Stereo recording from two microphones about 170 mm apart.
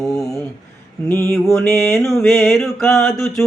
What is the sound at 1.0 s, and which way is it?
Speech, 15° left (ahead or behind).